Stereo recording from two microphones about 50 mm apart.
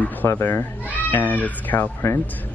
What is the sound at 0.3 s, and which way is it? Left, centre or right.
Speech, left.